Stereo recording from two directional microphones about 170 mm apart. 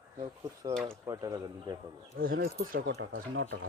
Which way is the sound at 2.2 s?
60° right (ahead or behind).